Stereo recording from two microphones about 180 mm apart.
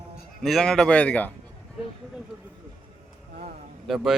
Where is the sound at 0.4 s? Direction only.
Centre (ahead or behind).